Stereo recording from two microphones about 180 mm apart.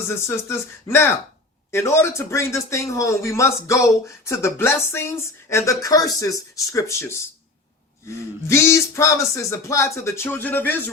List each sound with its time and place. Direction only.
0.3 s speech: 15° left (ahead or behind)
8.4 s speech: 15° left (ahead or behind)